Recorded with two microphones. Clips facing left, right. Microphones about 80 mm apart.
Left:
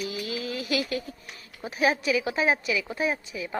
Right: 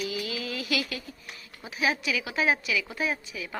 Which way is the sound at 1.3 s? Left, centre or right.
Left.